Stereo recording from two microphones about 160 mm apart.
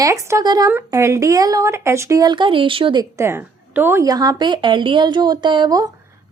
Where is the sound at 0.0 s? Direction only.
20° right (ahead or behind).